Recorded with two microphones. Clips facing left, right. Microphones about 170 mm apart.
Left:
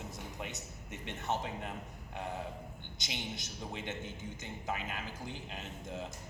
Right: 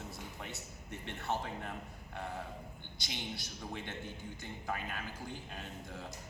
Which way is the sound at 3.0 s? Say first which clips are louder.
Left 1 dB; 20° left (ahead or behind).